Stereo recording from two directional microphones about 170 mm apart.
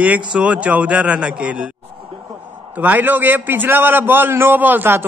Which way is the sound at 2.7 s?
10° right (ahead or behind).